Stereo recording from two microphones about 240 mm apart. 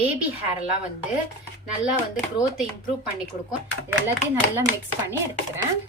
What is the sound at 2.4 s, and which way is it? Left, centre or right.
Speech, centre.